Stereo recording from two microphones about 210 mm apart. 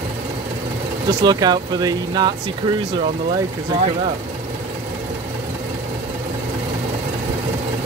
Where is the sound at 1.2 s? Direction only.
20° right (ahead or behind).